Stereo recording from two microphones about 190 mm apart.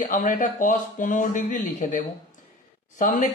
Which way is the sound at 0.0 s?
40° left (ahead or behind).